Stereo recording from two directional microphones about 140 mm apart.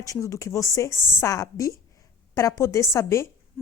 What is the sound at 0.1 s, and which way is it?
A woman's voice, 20° left (ahead or behind).